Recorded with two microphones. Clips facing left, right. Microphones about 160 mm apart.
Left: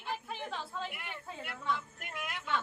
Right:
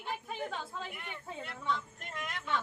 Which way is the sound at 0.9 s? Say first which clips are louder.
Right 1 dB; 5° left (ahead or behind).